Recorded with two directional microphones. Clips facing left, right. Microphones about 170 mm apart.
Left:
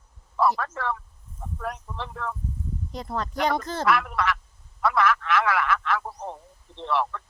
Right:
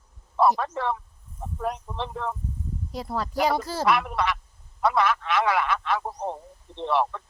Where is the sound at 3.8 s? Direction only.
20° right (ahead or behind).